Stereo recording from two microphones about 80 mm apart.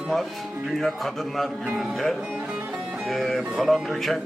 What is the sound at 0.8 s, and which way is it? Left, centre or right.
A man's voice, centre.